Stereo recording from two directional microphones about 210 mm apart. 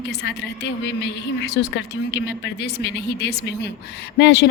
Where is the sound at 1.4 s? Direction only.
55° left (ahead or behind).